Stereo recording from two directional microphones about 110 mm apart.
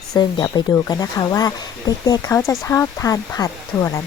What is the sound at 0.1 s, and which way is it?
Speech, 35° left (ahead or behind).